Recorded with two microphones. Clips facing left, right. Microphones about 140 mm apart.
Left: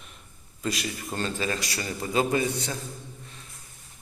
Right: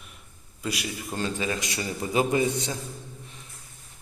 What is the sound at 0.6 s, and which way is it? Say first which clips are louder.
A man's voice: left 1 dB; 10° right (ahead or behind).